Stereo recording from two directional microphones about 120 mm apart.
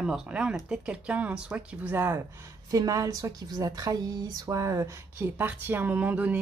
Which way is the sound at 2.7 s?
30° right (ahead or behind).